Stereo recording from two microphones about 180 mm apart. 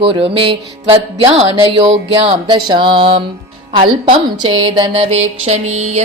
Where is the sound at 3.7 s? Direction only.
30° right (ahead or behind).